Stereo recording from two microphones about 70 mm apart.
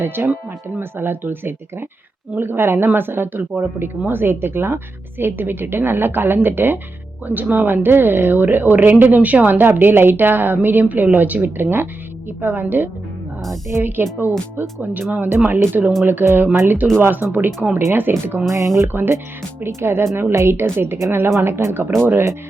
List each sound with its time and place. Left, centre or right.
0.2 s a woman's voice: right
18.5 s speech: right
18.9 s a woman's voice: right